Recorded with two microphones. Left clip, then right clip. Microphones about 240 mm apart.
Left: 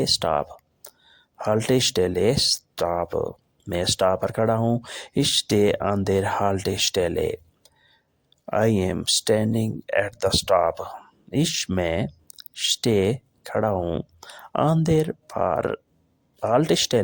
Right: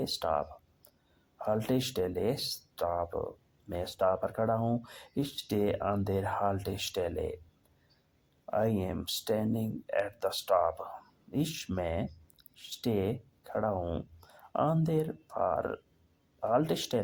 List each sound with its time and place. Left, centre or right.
0.0 s speech: left
8.4 s speech: left